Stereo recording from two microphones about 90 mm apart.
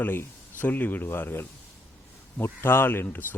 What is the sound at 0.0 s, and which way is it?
Speech, 20° left (ahead or behind).